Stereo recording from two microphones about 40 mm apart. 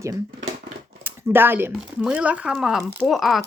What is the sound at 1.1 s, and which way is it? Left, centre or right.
Speech, right.